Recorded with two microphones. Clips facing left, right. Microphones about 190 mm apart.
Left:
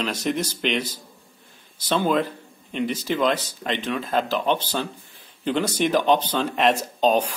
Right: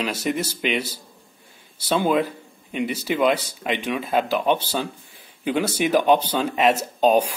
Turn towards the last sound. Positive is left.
turn(degrees=-10)  # may be behind; listen again after turning